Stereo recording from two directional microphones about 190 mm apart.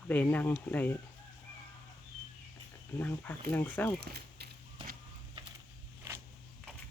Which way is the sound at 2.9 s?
10° left (ahead or behind).